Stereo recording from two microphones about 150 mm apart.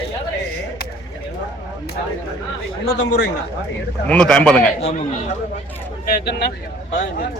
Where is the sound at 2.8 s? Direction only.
90° left.